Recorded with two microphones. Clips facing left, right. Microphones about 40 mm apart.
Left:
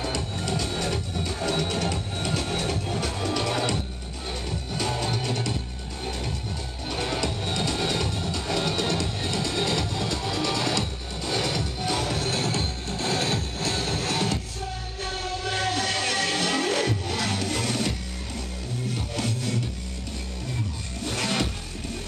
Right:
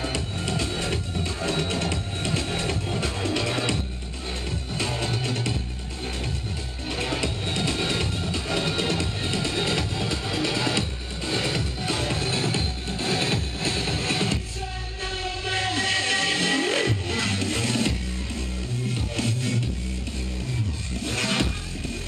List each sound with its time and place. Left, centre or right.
0.0 s music: right
4.7 s music: right
6.9 s music: right
15.0 s a sound: right
19.1 s music: right
21.0 s music: right